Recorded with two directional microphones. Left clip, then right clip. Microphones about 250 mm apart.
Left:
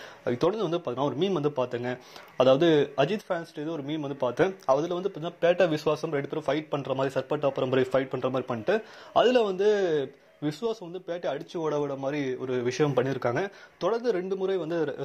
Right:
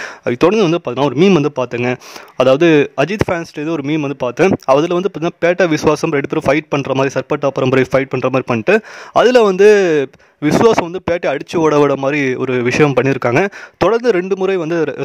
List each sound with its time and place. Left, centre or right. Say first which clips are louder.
0.0 s speech: right 13 dB; right